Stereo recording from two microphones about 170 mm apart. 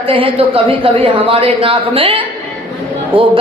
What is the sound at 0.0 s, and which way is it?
A woman's voice, 30° right (ahead or behind).